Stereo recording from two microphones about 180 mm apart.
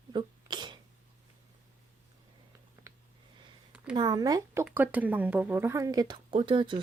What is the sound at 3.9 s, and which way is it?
Speech, 25° right (ahead or behind).